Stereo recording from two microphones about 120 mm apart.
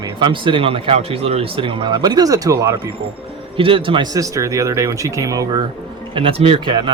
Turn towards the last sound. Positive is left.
turn(degrees=-45)  # may be behind; listen again after turning